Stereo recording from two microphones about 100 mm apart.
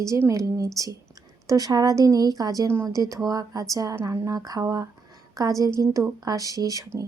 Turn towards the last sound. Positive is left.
turn(degrees=-35)  # may be behind; listen again after turning